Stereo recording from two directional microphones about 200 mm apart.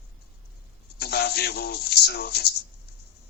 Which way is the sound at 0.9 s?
55° left (ahead or behind).